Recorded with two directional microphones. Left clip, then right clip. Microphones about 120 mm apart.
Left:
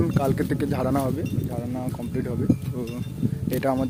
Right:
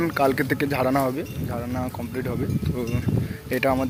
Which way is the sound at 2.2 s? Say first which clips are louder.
Right 1 dB; 30° left (ahead or behind).